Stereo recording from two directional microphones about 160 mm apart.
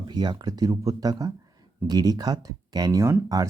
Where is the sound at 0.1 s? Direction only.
25° right (ahead or behind).